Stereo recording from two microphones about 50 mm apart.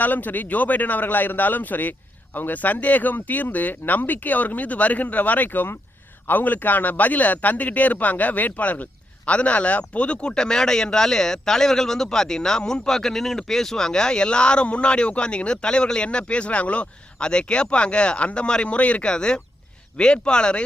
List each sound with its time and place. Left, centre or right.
0.0 s a man's voice: left; by 20.6 s centre